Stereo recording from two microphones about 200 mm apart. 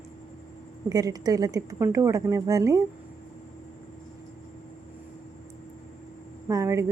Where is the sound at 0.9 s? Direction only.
20° right (ahead or behind).